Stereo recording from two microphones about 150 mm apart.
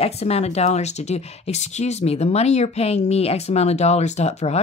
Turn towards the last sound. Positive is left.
turn(degrees=45)  # may be behind; listen again after turning